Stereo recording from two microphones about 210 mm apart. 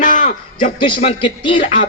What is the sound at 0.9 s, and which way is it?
Speech, 25° left (ahead or behind).